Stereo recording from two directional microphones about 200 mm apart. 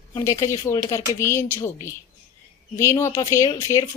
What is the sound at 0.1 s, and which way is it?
Speech, 15° left (ahead or behind).